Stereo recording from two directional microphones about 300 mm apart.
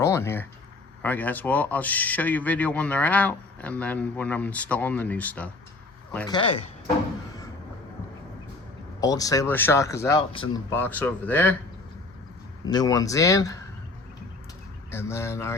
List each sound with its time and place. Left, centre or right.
0.0 s a sound: centre
1.0 s speech: centre
9.0 s speech: centre
12.6 s speech: centre
14.8 s speech: centre